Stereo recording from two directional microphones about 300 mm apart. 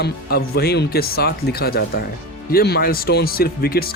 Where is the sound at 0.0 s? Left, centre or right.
Left.